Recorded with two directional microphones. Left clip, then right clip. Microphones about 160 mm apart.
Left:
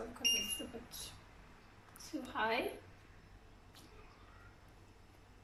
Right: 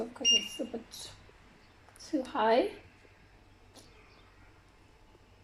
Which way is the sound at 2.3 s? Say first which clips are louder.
Right 9 dB; 55° right (ahead or behind).